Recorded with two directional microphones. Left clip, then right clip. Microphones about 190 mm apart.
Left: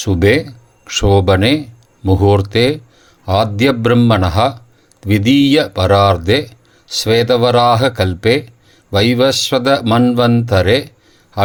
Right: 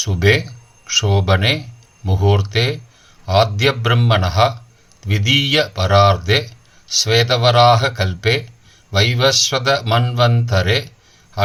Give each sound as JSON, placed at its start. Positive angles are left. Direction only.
{"t": 0.0, "sound": "speech", "side_deg": 40}